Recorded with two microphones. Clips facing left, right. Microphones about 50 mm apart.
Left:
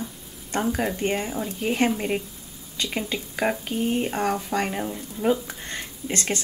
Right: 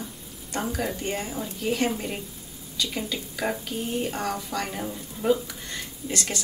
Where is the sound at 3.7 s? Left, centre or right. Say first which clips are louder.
Left 5 dB; left.